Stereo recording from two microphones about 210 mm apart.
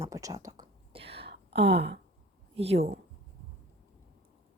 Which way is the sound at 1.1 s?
55° right (ahead or behind).